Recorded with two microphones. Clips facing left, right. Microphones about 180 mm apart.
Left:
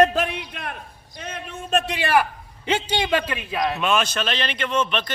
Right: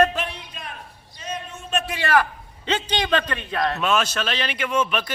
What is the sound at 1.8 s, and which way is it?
A man's voice, 15° left (ahead or behind).